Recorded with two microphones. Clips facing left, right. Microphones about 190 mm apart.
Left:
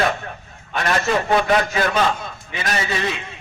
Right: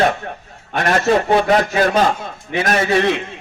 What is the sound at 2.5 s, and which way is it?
Speech, 55° right (ahead or behind).